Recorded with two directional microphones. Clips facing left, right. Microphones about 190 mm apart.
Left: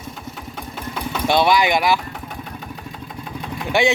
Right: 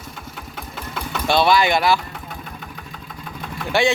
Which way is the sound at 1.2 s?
15° left (ahead or behind).